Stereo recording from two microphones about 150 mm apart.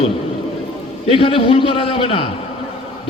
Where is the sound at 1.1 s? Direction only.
35° left (ahead or behind).